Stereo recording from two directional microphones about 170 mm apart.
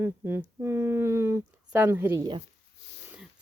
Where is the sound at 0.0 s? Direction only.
15° right (ahead or behind).